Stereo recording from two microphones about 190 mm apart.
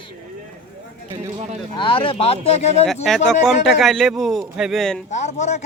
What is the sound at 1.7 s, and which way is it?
Speech, 25° left (ahead or behind).